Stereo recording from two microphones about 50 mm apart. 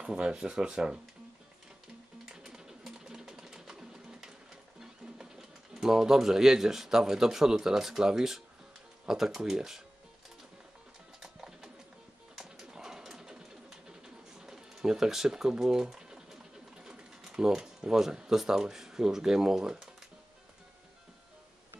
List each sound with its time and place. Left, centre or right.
0.0 s speech: centre
2.2 s music: centre
2.9 s a sound: centre
4.7 s speech: centre
11.1 s music: centre
12.4 s pigeon: centre